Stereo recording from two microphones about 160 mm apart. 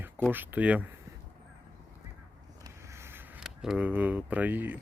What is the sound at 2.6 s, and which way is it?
Vehicle, 15° right (ahead or behind).